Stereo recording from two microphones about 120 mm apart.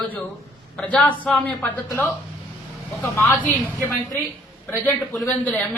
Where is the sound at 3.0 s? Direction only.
25° left (ahead or behind).